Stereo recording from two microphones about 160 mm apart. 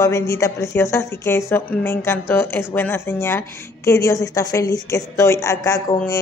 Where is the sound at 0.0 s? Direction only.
20° left (ahead or behind).